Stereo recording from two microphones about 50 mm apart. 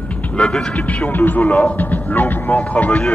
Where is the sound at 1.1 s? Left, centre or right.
Left.